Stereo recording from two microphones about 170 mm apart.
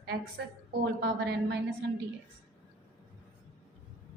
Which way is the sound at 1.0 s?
75° right (ahead or behind).